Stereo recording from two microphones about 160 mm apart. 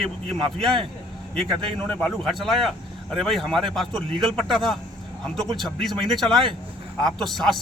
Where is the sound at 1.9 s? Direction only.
5° left (ahead or behind).